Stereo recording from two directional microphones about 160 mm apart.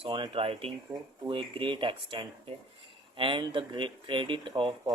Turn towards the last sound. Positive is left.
turn(degrees=-30)  # may be behind; listen again after turning